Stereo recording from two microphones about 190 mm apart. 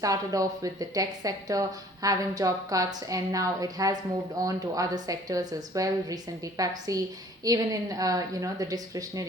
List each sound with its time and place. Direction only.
0.0 s a woman's voice: 20° right (ahead or behind)